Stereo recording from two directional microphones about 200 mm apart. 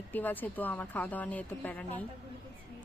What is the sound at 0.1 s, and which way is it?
A woman's voice, 10° left (ahead or behind).